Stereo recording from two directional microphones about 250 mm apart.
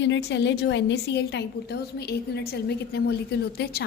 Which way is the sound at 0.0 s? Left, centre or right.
Left.